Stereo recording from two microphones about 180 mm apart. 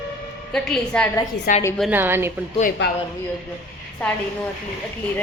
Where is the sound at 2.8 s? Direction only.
80° left.